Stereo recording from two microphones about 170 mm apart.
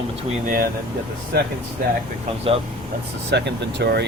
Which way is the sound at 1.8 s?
60° right (ahead or behind).